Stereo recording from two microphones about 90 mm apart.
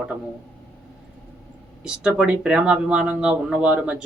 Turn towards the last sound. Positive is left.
turn(degrees=-15)  # may be behind; listen again after turning